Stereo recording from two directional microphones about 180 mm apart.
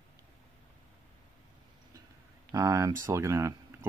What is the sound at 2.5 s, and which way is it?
Speech, 20° right (ahead or behind).